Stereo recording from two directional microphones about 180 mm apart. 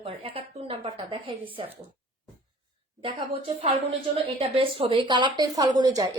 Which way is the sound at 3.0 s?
30° right (ahead or behind).